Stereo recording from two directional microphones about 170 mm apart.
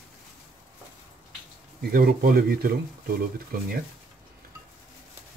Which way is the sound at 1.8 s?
65° right (ahead or behind).